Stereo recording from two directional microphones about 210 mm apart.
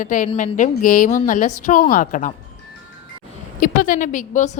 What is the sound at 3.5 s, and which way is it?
Speech, 40° left (ahead or behind).